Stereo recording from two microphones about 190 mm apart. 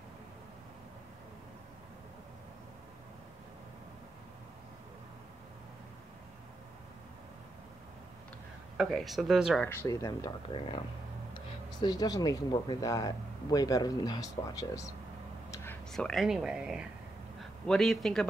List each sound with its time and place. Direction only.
8.7 s speech: centre (ahead or behind)
9.7 s speech: 15° left (ahead or behind)
15.5 s a sound: 10° left (ahead or behind)
15.9 s a man's voice: 5° left (ahead or behind)